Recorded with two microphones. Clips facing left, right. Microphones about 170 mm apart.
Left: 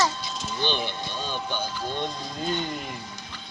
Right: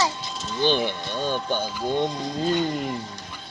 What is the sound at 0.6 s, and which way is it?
Speech, 45° right (ahead or behind).